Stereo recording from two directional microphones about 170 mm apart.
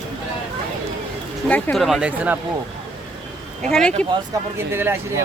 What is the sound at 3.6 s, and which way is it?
Speech, 5° left (ahead or behind).